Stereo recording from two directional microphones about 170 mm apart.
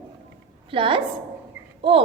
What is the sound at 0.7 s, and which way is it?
Speech, 30° right (ahead or behind).